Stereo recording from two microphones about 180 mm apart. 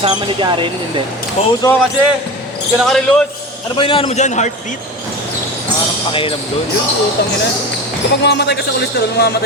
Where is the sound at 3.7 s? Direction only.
30° left (ahead or behind).